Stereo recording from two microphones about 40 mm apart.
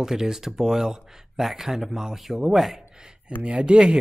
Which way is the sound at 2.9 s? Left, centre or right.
Centre.